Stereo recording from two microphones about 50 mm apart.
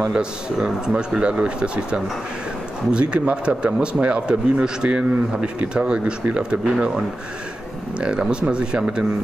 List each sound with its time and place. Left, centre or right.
0.1 s speech: centre